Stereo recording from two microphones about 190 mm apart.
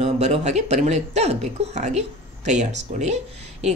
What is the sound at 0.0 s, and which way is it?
Speech, 35° right (ahead or behind).